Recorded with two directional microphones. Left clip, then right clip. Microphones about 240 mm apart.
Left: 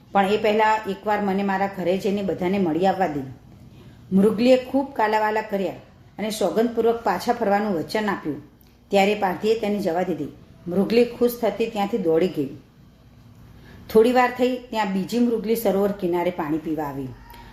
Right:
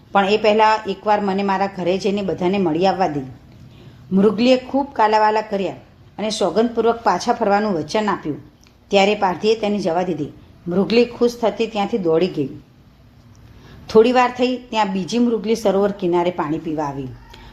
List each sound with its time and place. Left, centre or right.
0.1 s a woman's voice: right
4.1 s a woman's voice: centre
13.8 s a woman's voice: centre